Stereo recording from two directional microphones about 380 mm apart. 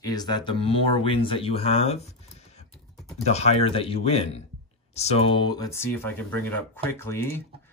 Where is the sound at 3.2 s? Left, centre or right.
Centre.